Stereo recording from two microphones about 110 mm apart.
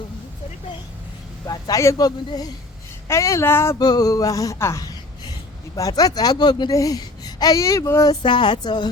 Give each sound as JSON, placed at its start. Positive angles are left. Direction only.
{"t": 1.5, "sound": "speech", "side_deg": 35}
{"t": 3.8, "sound": "speech", "side_deg": 35}
{"t": 8.2, "sound": "speech", "side_deg": 45}